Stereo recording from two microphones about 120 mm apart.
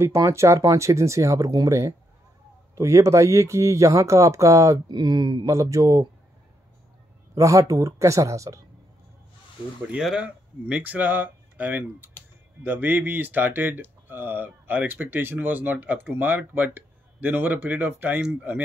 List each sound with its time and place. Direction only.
0.0 s speech: 25° right (ahead or behind)
7.3 s speech: 25° right (ahead or behind)
9.8 s speech: 5° right (ahead or behind)